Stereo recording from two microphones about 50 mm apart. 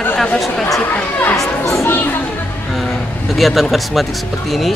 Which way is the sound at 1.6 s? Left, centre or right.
Left.